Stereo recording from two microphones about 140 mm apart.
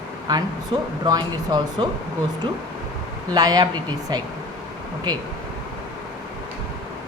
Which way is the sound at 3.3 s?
30° right (ahead or behind).